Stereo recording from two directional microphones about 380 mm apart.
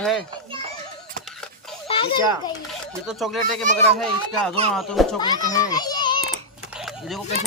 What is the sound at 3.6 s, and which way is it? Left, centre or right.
Speech, centre.